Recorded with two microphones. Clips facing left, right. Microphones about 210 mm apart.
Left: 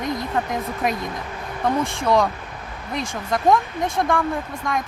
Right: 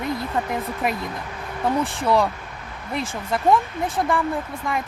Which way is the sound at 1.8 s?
35° right (ahead or behind).